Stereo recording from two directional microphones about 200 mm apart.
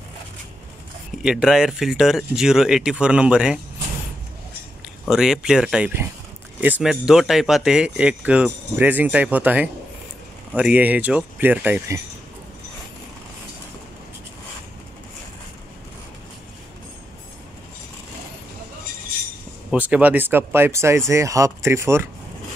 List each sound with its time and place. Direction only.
1.1 s speech: centre (ahead or behind)
5.1 s speech: 5° right (ahead or behind)
19.7 s speech: 5° right (ahead or behind)